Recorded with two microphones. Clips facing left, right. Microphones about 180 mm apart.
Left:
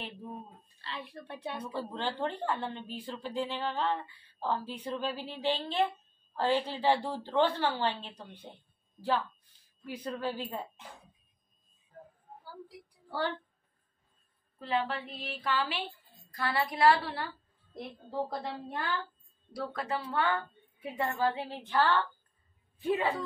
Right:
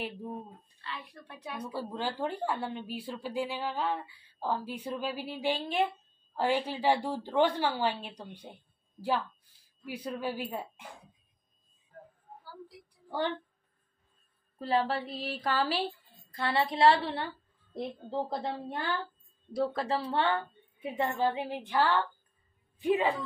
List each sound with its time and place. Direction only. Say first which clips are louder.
0.7 s a woman's voice: left 2 dB; 30° left (ahead or behind)
1.6 s a woman's voice: right 3 dB; 10° right (ahead or behind)
14.6 s speech: right 3 dB; 35° right (ahead or behind)
16.3 s a woman's voice: right 2 dB; 25° right (ahead or behind)
18.4 s a woman's voice: right 2 dB; 30° right (ahead or behind)